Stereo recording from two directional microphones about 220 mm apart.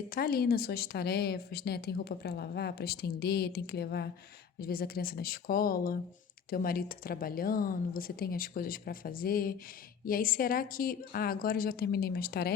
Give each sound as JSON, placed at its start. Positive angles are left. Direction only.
{"t": 0.1, "sound": "a woman's voice", "side_deg": 45}